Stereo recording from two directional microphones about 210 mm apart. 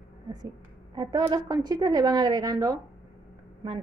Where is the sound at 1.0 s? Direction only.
20° right (ahead or behind).